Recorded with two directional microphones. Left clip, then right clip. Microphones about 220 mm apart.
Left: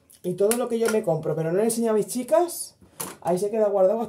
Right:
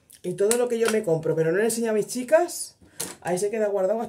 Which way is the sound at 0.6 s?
20° right (ahead or behind).